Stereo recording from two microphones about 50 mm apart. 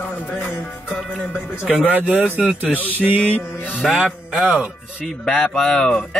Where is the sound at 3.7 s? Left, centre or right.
Centre.